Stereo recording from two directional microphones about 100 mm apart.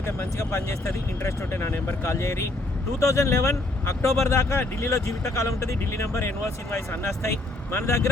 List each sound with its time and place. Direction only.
0.0 s speech: 25° left (ahead or behind)